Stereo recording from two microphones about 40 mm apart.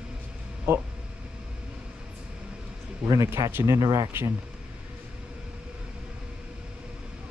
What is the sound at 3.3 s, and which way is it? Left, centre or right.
Speech, right.